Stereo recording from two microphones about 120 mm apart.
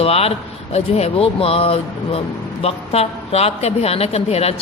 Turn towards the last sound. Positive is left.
turn(degrees=60)  # may be behind; listen again after turning